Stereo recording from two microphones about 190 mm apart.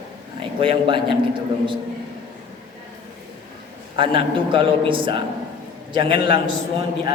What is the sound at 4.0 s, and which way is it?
A man's voice, 25° right (ahead or behind).